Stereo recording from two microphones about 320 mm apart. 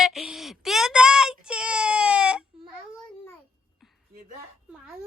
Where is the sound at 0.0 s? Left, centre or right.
Centre.